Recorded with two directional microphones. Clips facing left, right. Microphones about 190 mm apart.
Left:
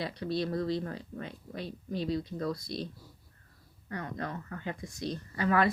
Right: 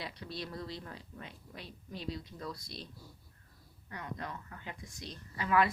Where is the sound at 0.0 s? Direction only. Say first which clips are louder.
Left 10 dB; 35° left (ahead or behind).